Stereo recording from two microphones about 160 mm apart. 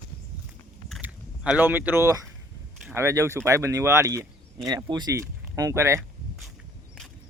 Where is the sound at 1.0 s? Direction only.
10° right (ahead or behind).